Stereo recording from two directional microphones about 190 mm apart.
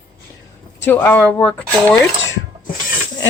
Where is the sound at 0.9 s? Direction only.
10° left (ahead or behind).